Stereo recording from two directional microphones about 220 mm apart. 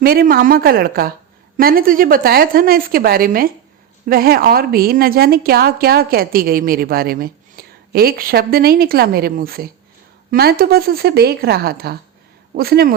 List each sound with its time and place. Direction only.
0.0 s a woman's voice: 45° right (ahead or behind)